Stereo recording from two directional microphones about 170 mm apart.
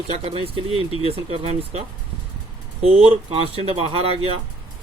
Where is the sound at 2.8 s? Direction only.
35° right (ahead or behind).